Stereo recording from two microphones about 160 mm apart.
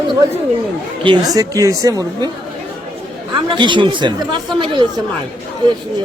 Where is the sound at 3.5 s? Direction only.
30° right (ahead or behind).